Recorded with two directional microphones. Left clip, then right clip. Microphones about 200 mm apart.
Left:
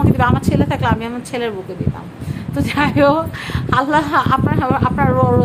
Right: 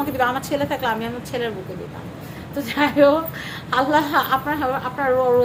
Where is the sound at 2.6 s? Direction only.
45° left (ahead or behind).